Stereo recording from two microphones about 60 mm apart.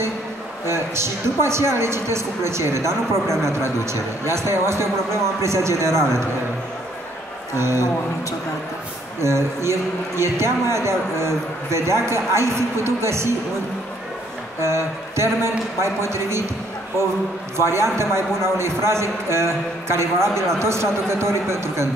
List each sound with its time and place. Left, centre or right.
0.7 s a man's voice: right
7.5 s a man's voice: right
9.2 s a man's voice: right
14.6 s a man's voice: right
17.6 s a man's voice: right